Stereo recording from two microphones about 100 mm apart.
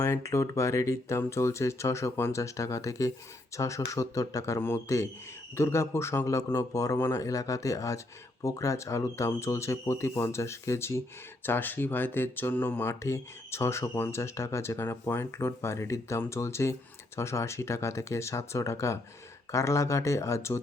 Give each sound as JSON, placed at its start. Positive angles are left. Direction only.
{"t": 0.0, "sound": "a man's voice", "side_deg": 30}